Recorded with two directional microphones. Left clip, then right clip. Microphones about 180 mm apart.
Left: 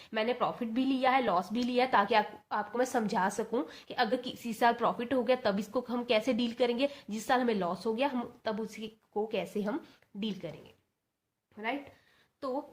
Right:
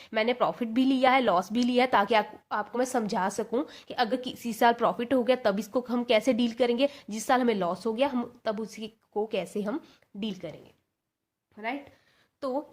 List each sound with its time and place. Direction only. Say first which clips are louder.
0.0 s a woman's voice: right 5 dB; 45° right (ahead or behind); by 10.5 s 30° right (ahead or behind)
11.5 s speech: right 2 dB; 30° right (ahead or behind)
12.4 s a woman's voice: right 4 dB; 40° right (ahead or behind)